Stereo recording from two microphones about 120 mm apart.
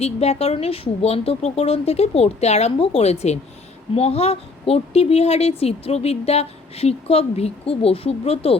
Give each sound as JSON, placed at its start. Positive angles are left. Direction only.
{"t": 0.0, "sound": "a woman's voice", "side_deg": 60}